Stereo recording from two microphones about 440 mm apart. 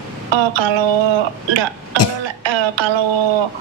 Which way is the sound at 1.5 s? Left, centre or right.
Right.